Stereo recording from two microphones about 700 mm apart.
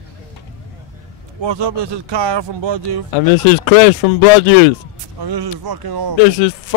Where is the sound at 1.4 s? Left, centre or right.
Right.